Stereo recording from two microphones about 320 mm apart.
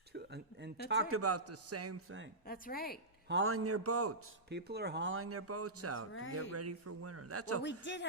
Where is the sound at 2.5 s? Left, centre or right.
Left.